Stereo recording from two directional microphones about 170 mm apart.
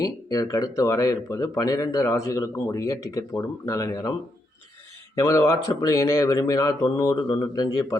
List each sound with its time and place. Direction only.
0.0 s speech: 20° left (ahead or behind)
5.2 s speech: 20° left (ahead or behind)